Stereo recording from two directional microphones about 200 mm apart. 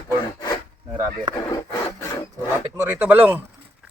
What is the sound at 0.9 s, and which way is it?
Speech, 20° right (ahead or behind).